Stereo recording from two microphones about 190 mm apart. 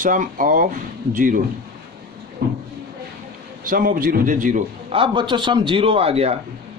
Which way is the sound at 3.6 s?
45° right (ahead or behind).